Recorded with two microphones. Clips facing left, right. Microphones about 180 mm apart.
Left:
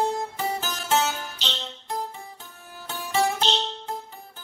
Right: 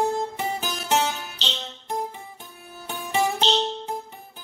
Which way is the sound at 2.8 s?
20° right (ahead or behind).